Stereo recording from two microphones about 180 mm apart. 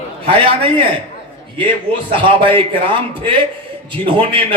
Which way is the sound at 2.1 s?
30° right (ahead or behind).